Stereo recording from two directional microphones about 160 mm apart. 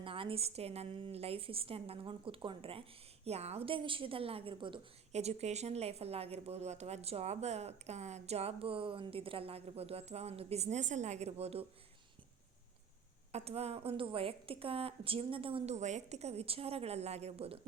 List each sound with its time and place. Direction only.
0.0 s a woman's voice: 35° right (ahead or behind)
13.3 s a woman's voice: 40° right (ahead or behind)